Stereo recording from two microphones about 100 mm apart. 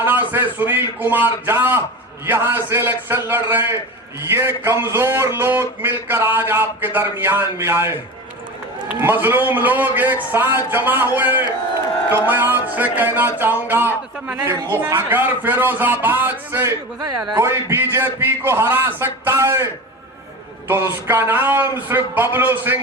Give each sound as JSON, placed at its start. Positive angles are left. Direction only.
{"t": 0.0, "sound": "speech", "side_deg": -20}
{"t": 9.0, "sound": "speech", "side_deg": -20}
{"t": 17.0, "sound": "speech", "side_deg": -40}
{"t": 20.7, "sound": "speech", "side_deg": -25}